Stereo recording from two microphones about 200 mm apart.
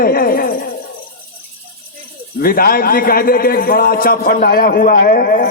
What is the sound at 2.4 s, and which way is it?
Speech, 45° left (ahead or behind).